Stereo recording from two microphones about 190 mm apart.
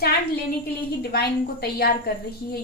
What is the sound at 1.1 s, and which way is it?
A woman's voice, 55° left (ahead or behind).